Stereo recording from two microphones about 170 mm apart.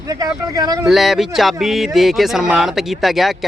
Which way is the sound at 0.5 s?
25° right (ahead or behind).